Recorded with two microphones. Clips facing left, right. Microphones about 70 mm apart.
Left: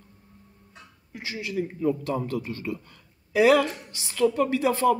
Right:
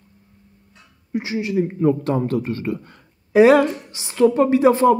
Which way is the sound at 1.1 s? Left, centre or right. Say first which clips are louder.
Right 9 dB; right.